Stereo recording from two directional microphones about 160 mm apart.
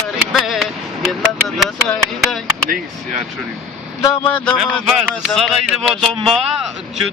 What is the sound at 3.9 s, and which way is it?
Speech, 20° left (ahead or behind).